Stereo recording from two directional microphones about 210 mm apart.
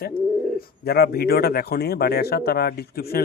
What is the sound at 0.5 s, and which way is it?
Speech, 45° left (ahead or behind).